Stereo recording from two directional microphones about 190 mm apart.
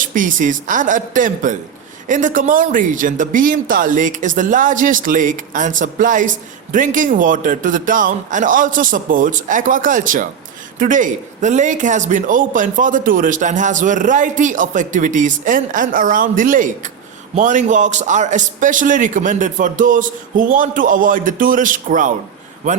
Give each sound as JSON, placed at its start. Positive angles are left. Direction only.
{"t": 0.0, "sound": "speech", "side_deg": -45}